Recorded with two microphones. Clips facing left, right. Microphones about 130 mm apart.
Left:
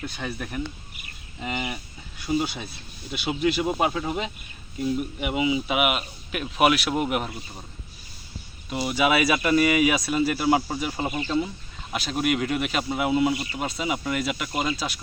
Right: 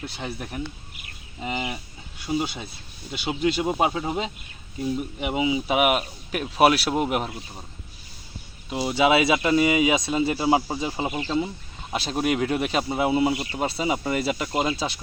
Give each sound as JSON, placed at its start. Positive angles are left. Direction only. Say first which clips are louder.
{"t": 0.0, "sound": "speech", "louder": "left 1 dB", "side_deg": -20}
{"t": 5.6, "sound": "speech", "louder": "right 3 dB", "side_deg": -40}
{"t": 8.7, "sound": "speech", "louder": "right 2 dB", "side_deg": -25}
{"t": 11.9, "sound": "speech", "louder": "right 1 dB", "side_deg": -30}